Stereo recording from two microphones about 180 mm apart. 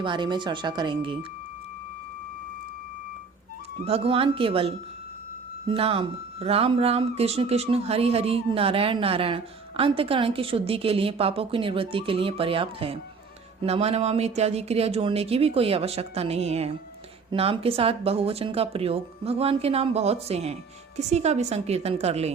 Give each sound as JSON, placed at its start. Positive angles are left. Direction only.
{"t": 0.0, "sound": "speech", "side_deg": -25}
{"t": 3.8, "sound": "speech", "side_deg": -30}